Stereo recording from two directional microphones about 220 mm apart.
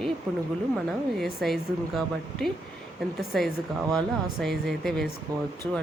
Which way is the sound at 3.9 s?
5° left (ahead or behind).